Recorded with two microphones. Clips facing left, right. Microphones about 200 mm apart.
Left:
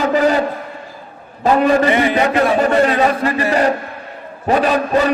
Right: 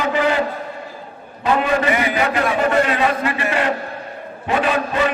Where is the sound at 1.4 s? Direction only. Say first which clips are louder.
Left 5 dB; 40° left (ahead or behind).